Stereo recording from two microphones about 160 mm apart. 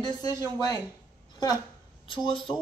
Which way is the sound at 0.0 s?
25° left (ahead or behind).